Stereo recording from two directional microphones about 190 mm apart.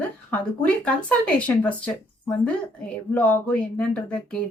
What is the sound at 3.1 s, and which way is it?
Speech, 10° left (ahead or behind).